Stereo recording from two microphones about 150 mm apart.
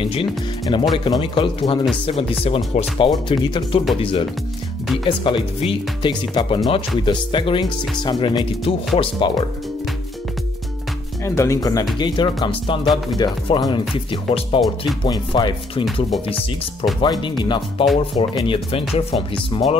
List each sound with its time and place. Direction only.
0.0 s speech: 35° left (ahead or behind)
11.2 s speech: 20° left (ahead or behind)
17.0 s speech: 30° left (ahead or behind)